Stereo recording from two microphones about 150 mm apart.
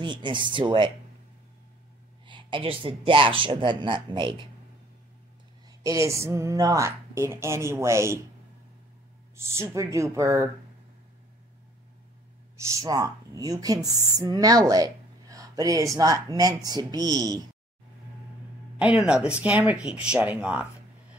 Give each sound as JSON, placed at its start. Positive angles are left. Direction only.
{"t": 0.0, "sound": "speech", "side_deg": -30}
{"t": 2.2, "sound": "speech", "side_deg": -30}
{"t": 5.7, "sound": "speech", "side_deg": -20}
{"t": 9.6, "sound": "speech", "side_deg": -20}
{"t": 12.6, "sound": "speech", "side_deg": -25}
{"t": 18.8, "sound": "speech", "side_deg": -5}